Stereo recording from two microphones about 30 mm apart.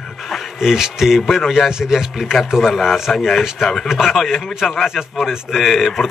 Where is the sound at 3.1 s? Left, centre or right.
Centre.